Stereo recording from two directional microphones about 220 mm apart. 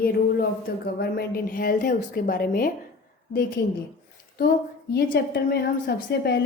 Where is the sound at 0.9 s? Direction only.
40° left (ahead or behind).